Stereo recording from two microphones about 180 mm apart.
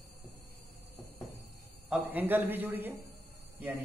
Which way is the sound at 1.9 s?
10° right (ahead or behind).